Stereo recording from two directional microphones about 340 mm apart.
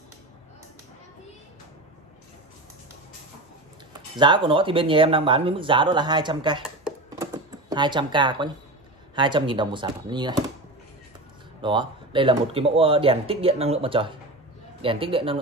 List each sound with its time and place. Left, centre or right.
4.2 s speech: centre
7.7 s speech: centre
11.6 s speech: centre